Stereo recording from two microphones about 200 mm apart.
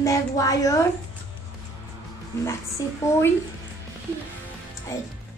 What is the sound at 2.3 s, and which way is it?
Speech, 15° left (ahead or behind).